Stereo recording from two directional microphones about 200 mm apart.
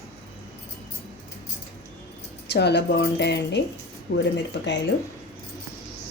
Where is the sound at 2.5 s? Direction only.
55° left (ahead or behind).